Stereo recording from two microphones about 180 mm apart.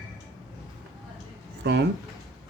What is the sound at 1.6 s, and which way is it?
Speech, 70° right (ahead or behind).